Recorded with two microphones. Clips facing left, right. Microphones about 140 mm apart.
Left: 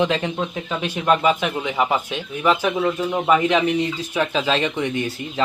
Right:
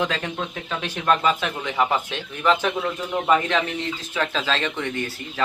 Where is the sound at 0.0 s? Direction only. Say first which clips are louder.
Left 5 dB; 20° left (ahead or behind).